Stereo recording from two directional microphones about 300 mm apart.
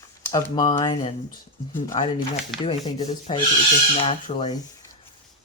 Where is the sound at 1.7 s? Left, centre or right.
Left.